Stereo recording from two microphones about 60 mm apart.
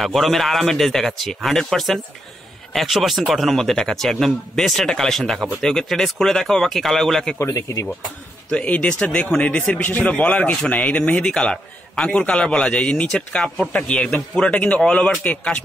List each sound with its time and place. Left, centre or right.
0.0 s a man's voice: centre
7.3 s speech: left
8.5 s speech: left
11.3 s a man's voice: centre